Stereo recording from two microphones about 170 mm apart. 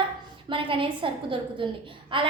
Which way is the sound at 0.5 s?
30° right (ahead or behind).